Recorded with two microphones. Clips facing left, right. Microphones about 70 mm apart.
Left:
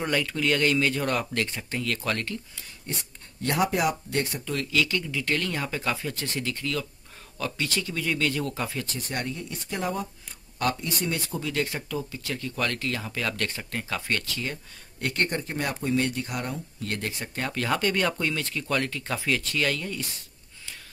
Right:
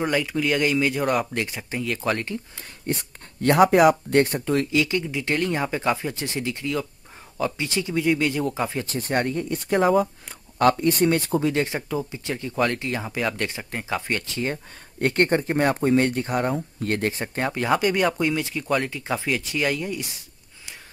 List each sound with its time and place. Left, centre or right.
0.0 s speech: centre
2.9 s speech: right
4.6 s speech: right
11.4 s speech: right
14.5 s speech: right
17.5 s speech: centre